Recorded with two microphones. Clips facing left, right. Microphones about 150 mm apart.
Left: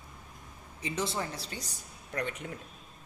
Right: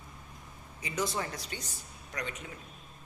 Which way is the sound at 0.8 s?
25° left (ahead or behind).